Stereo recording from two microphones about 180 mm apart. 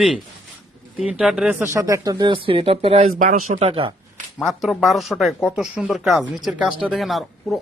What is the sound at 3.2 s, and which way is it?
Speech, 50° right (ahead or behind).